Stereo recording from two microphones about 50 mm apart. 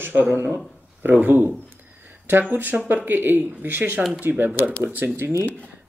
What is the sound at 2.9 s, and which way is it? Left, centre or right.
Speech, right.